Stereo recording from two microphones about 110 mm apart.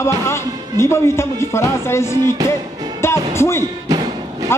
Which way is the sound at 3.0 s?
25° left (ahead or behind).